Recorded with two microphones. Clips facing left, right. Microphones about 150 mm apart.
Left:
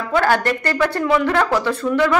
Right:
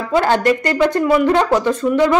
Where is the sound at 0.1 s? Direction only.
20° right (ahead or behind).